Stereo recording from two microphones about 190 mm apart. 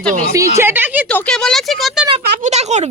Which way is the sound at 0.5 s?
10° right (ahead or behind).